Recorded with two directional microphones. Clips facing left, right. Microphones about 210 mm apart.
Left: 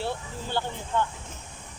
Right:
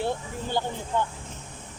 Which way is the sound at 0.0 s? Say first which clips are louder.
Right 3 dB; 15° right (ahead or behind).